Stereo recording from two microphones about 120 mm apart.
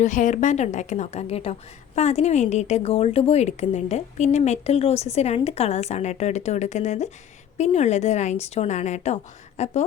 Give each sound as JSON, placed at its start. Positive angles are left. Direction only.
{"t": 0.0, "sound": "a woman's voice", "side_deg": 90}
{"t": 2.0, "sound": "a woman's voice", "side_deg": 70}
{"t": 9.6, "sound": "a woman's voice", "side_deg": 65}